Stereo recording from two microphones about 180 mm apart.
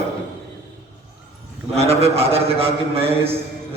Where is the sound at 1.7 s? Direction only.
35° right (ahead or behind).